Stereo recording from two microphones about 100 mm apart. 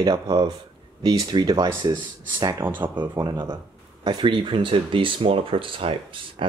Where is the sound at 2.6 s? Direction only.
20° right (ahead or behind).